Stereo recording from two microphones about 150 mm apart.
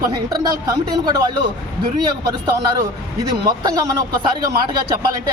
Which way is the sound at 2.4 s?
25° right (ahead or behind).